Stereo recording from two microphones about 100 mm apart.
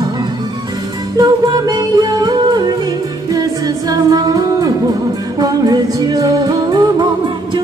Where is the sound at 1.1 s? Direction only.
40° right (ahead or behind).